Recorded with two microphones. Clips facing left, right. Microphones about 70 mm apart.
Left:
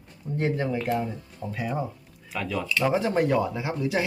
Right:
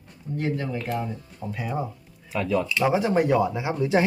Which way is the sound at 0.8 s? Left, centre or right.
Centre.